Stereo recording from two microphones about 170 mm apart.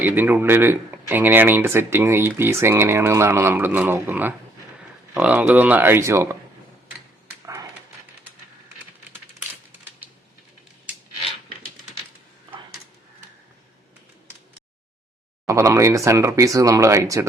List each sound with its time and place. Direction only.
0.0 s speech: 10° right (ahead or behind)
7.4 s dog: 20° right (ahead or behind)
15.4 s speech: 20° right (ahead or behind)